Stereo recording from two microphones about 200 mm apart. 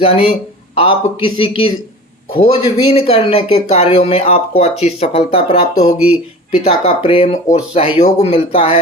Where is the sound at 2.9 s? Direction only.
30° left (ahead or behind).